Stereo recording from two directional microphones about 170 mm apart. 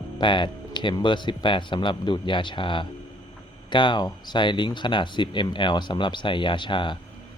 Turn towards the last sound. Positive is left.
turn(degrees=30)  # may be behind; listen again after turning